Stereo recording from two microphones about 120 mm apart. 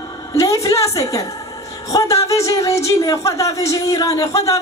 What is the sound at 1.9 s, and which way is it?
Speech, 25° left (ahead or behind).